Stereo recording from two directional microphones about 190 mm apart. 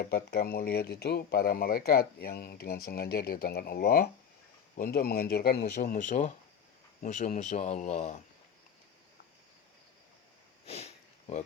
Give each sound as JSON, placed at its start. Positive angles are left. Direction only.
{"t": 0.0, "sound": "speech", "side_deg": 55}
{"t": 5.9, "sound": "speech", "side_deg": 40}
{"t": 10.7, "sound": "sniff", "side_deg": 35}